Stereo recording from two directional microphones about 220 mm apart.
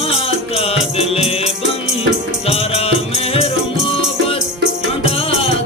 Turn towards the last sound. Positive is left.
turn(degrees=25)  # may be behind; listen again after turning